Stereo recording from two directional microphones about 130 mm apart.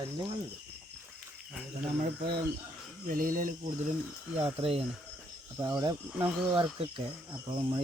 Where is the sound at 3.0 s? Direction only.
90° right.